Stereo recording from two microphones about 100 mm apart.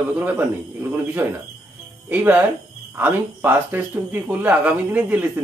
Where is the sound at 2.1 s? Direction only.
20° right (ahead or behind).